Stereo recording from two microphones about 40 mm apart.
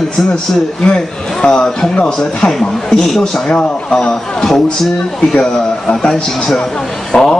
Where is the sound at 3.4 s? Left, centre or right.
Centre.